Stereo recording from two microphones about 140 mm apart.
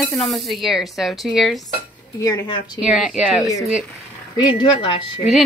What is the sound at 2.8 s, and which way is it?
Speech, centre (ahead or behind).